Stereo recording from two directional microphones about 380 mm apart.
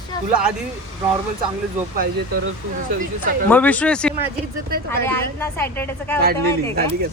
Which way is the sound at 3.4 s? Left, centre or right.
Centre.